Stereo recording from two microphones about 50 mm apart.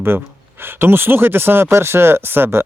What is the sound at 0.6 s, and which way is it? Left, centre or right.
Speech, right.